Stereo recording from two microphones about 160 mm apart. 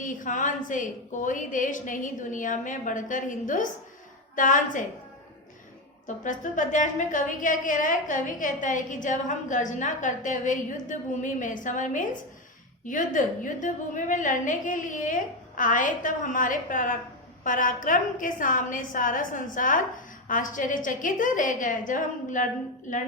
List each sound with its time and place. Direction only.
0.0 s a woman's voice: 55° left (ahead or behind)
6.1 s a woman's voice: 50° left (ahead or behind)